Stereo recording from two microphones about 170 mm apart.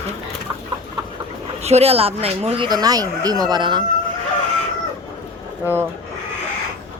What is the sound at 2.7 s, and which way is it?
Speech, 20° right (ahead or behind).